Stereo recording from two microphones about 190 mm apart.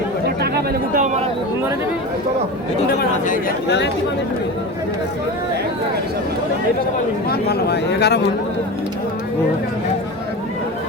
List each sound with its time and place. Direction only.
0.9 s speech: 40° right (ahead or behind)
3.0 s speech: 45° left (ahead or behind)
7.3 s speech: 55° left (ahead or behind)